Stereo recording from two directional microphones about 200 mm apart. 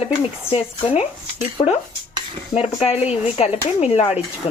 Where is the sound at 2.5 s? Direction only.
30° left (ahead or behind).